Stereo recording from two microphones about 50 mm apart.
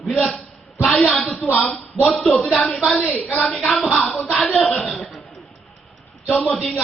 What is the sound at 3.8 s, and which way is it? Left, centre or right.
Music, left.